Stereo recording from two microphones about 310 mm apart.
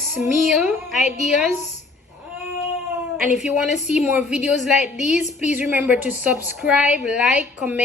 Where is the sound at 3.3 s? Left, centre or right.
Centre.